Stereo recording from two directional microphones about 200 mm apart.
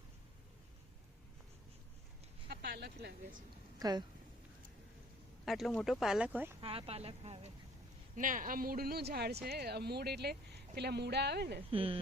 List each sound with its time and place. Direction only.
2.5 s speech: 55° right (ahead or behind)
3.8 s speech: 20° right (ahead or behind)
5.5 s speech: centre (ahead or behind)
6.6 s speech: 30° right (ahead or behind)
8.1 s speech: 40° right (ahead or behind)
11.7 s speech: 30° right (ahead or behind)